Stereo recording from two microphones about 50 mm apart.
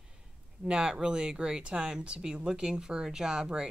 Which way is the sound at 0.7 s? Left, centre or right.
Centre.